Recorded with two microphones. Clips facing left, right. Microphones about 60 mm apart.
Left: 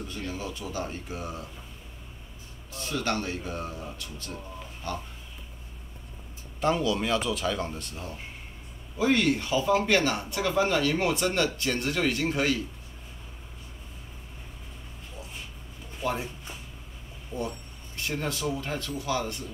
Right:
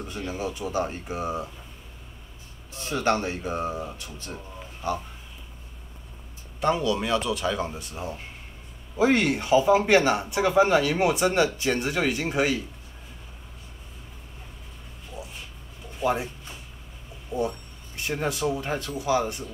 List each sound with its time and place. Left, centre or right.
0.0 s speech: right
2.8 s speech: right
6.6 s speech: centre
7.9 s speech: right
16.0 s speech: centre
17.3 s speech: centre